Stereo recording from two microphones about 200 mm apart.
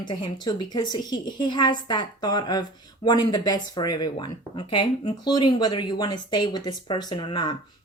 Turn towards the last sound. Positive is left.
turn(degrees=25)  # may be behind; listen again after turning